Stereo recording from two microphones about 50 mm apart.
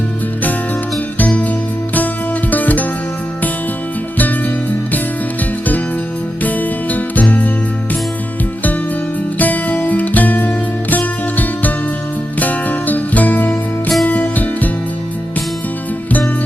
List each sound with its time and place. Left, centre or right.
2.0 s music: left
4.2 s music: left
6.4 s music: left
9.4 s music: left